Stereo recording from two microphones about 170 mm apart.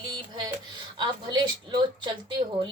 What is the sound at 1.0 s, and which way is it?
Speech, 25° right (ahead or behind).